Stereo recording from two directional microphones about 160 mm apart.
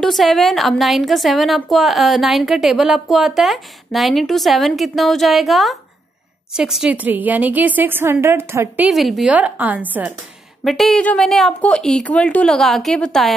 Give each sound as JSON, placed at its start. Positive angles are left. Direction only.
{"t": 0.0, "sound": "a woman's voice", "side_deg": 0}
{"t": 8.9, "sound": "a woman's voice", "side_deg": 0}
{"t": 10.6, "sound": "a woman's voice", "side_deg": 0}